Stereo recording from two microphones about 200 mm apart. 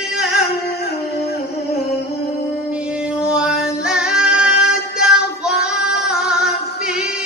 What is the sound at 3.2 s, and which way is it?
Singing, 5° right (ahead or behind).